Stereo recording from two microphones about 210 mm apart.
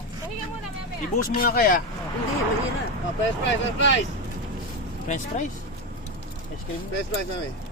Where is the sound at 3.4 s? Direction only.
60° left (ahead or behind).